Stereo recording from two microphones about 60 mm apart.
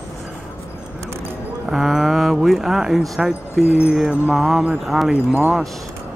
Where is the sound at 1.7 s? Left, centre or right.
Centre.